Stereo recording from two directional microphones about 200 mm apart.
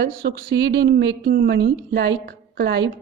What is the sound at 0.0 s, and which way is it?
A woman's voice, 55° right (ahead or behind).